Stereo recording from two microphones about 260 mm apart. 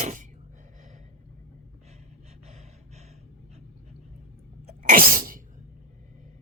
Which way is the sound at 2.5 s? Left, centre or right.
Right.